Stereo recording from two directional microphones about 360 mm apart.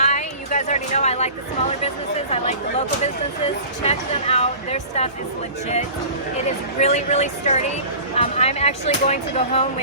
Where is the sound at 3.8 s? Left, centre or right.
Centre.